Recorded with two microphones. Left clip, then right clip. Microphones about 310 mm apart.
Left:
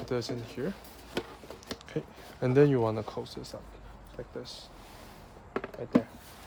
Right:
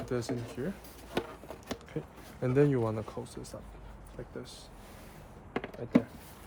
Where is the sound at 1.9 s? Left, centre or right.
Left.